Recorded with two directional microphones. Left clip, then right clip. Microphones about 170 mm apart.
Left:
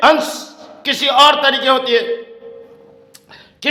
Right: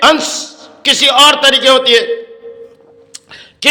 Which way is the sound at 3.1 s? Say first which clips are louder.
Right 7 dB; 15° right (ahead or behind).